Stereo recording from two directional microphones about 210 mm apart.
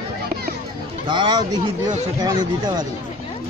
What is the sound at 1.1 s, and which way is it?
Speech, 20° right (ahead or behind).